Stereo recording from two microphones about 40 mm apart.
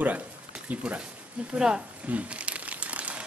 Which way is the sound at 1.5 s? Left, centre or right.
Centre.